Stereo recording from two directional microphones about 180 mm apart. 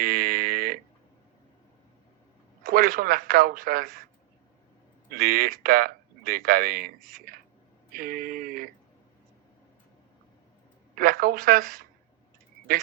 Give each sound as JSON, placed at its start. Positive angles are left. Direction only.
{"t": 0.0, "sound": "a sound", "side_deg": -55}
{"t": 2.6, "sound": "speech", "side_deg": -55}
{"t": 5.1, "sound": "speech", "side_deg": -55}
{"t": 10.9, "sound": "speech", "side_deg": -55}